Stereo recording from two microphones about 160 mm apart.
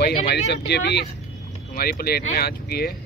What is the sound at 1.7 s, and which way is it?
Speech, 70° left (ahead or behind).